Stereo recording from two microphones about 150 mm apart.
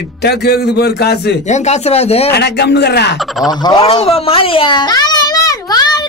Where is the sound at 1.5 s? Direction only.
50° left (ahead or behind).